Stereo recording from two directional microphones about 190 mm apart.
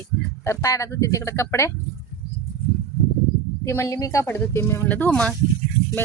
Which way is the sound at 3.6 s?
15° left (ahead or behind).